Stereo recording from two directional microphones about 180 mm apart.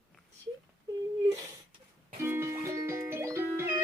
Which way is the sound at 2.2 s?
15° right (ahead or behind).